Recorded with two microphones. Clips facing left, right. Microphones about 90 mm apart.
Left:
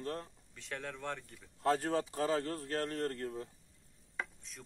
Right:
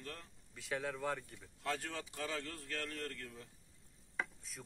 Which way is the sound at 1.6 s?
35° left (ahead or behind).